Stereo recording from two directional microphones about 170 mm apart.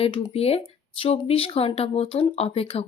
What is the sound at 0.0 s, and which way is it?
Speech, 35° left (ahead or behind).